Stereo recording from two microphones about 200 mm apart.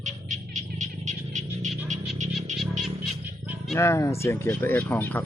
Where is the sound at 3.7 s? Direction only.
15° left (ahead or behind).